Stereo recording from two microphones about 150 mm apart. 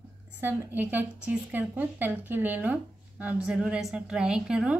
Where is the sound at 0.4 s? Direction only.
10° right (ahead or behind).